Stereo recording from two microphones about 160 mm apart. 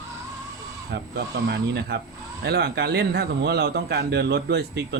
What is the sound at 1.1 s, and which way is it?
Speech, 90° right.